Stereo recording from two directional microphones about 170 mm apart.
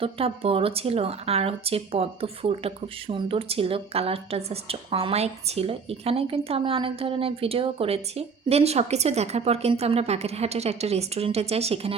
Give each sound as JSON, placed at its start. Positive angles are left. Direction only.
{"t": 0.0, "sound": "speech", "side_deg": -35}